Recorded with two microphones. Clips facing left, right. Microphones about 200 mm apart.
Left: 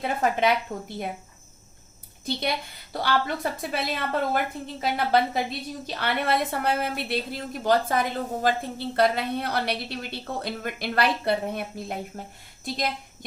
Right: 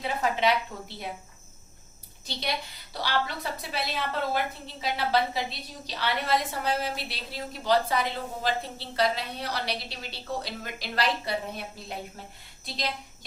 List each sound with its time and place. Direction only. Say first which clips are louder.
0.0 s a woman's voice: left 3 dB; 50° left (ahead or behind)
2.9 s a woman's voice: left 4 dB; 50° left (ahead or behind)